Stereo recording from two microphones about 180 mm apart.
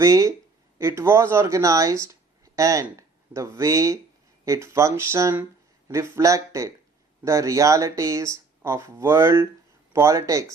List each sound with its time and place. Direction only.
0.0 s speech: 20° right (ahead or behind)